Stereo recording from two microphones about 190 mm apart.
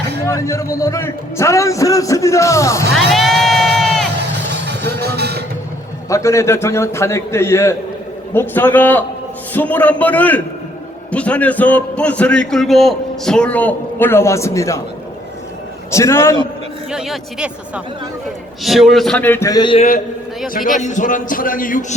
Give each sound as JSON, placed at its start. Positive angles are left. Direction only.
{"t": 0.3, "sound": "a man's voice", "side_deg": 15}
{"t": 3.1, "sound": "crowd", "side_deg": 0}
{"t": 4.6, "sound": "music", "side_deg": -60}
{"t": 6.1, "sound": "a man's voice", "side_deg": 15}
{"t": 15.9, "sound": "a man's voice", "side_deg": 15}
{"t": 16.9, "sound": "a man's voice", "side_deg": 0}
{"t": 20.8, "sound": "a man's voice", "side_deg": 40}